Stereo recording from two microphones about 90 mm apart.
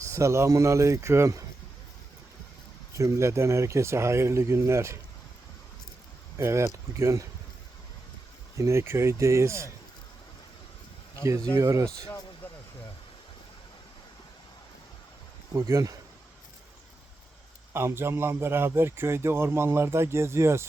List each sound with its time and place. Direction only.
0.1 s speech: 35° right (ahead or behind)
3.0 s speech: 35° right (ahead or behind)
6.3 s speech: 30° right (ahead or behind)
8.5 s speech: 30° right (ahead or behind)
11.5 s speech: 40° right (ahead or behind)
15.5 s speech: 40° right (ahead or behind)
17.7 s a man's voice: 25° right (ahead or behind)